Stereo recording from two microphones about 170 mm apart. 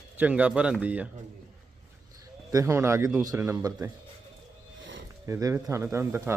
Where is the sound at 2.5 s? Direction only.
20° right (ahead or behind).